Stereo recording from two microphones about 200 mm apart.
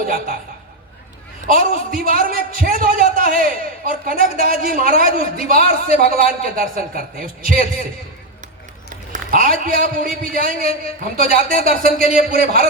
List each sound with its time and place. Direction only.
0.0 s a man's voice: 45° right (ahead or behind)
1.5 s a man's voice: 45° right (ahead or behind)
9.1 s a man's voice: 45° right (ahead or behind)